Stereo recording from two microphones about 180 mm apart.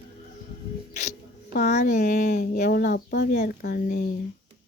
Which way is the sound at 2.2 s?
60° left (ahead or behind).